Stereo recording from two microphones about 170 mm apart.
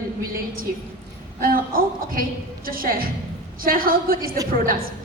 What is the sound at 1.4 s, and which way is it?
A woman's voice, 60° right (ahead or behind).